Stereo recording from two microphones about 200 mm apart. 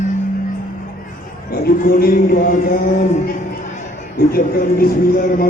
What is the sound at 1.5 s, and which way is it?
A man's voice, 45° left (ahead or behind).